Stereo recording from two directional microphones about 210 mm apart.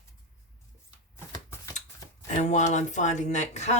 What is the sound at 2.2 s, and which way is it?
Speech, 35° left (ahead or behind).